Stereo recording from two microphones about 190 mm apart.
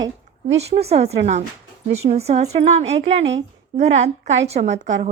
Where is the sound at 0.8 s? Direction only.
35° right (ahead or behind).